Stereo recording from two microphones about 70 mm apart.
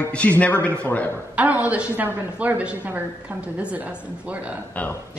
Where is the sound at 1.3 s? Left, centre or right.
Right.